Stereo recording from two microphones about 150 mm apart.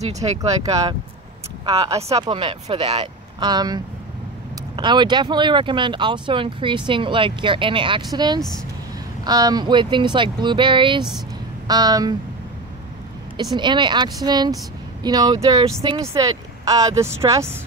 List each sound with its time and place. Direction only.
0.0 s speech: 45° right (ahead or behind)
2.1 s speech: 30° right (ahead or behind)
13.6 s speech: 30° right (ahead or behind)